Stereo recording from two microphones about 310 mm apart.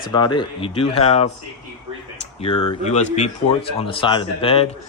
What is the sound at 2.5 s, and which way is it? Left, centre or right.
Speech, left.